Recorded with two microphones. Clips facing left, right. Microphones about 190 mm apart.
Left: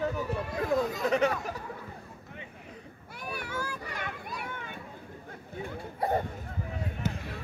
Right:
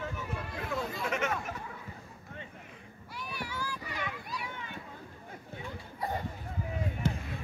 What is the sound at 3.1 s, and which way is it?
Children playing, 50° left (ahead or behind).